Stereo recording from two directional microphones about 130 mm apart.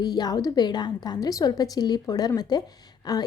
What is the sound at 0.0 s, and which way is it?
A woman's voice, 30° left (ahead or behind).